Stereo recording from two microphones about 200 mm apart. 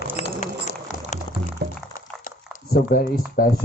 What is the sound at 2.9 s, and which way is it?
Speech, 50° left (ahead or behind).